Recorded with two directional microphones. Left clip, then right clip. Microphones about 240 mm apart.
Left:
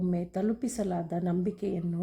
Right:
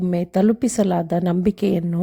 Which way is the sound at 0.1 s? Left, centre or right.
Right.